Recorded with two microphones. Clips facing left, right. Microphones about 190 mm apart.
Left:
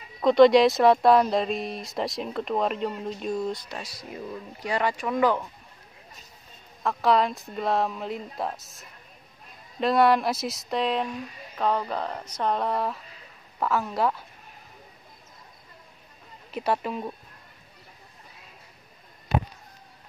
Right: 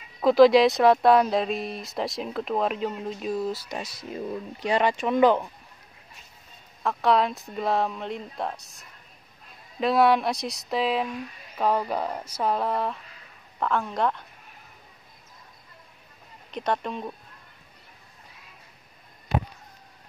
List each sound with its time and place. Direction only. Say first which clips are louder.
0.2 s speech: even; centre (ahead or behind)
3.6 s speech: right 3 dB; 20° right (ahead or behind)
6.8 s speech: even; centre (ahead or behind)
16.4 s speech: left 1 dB; 5° left (ahead or behind)